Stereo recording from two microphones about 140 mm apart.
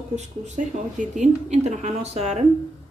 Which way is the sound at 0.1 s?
60° right (ahead or behind).